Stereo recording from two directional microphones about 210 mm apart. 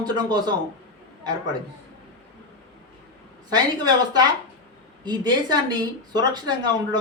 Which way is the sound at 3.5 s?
20° right (ahead or behind).